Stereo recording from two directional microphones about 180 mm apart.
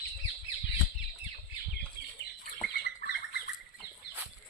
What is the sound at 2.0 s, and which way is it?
Chicken, 60° left (ahead or behind).